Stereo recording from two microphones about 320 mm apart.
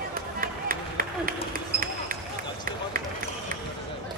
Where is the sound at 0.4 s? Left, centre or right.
Right.